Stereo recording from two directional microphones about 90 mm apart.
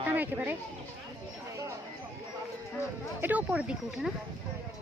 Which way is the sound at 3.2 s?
20° right (ahead or behind).